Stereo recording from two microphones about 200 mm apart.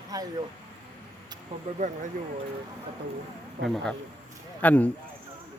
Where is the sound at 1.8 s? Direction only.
40° right (ahead or behind).